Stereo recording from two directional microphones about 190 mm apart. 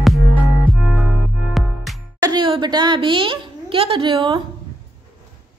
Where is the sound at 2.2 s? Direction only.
25° right (ahead or behind).